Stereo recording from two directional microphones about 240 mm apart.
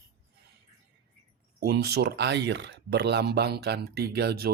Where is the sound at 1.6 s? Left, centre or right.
Right.